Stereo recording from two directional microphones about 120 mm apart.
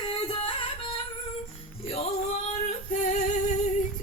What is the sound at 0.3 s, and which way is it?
Music, 45° left (ahead or behind).